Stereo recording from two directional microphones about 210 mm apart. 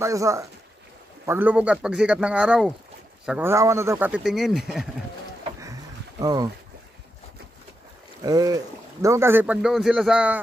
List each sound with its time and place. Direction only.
0.0 s speech: 15° right (ahead or behind)
6.2 s speech: 15° right (ahead or behind)
8.2 s speech: 15° right (ahead or behind)